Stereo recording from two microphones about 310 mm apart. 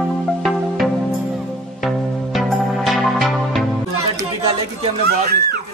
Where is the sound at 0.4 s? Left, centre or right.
Centre.